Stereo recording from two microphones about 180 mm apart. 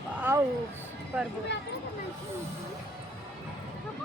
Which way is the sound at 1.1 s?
10° right (ahead or behind).